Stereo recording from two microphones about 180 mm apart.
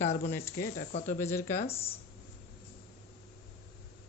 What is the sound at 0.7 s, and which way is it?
Speech, 45° left (ahead or behind).